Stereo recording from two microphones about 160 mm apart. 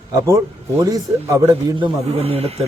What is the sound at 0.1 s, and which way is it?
A man's voice, 20° right (ahead or behind).